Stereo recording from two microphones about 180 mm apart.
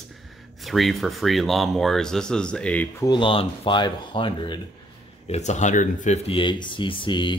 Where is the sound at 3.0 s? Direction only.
25° left (ahead or behind).